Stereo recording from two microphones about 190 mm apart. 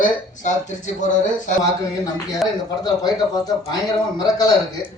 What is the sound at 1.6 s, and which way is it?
A man's voice, 20° left (ahead or behind).